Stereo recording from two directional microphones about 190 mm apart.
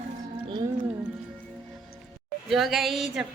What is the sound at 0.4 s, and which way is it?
Music, 20° right (ahead or behind).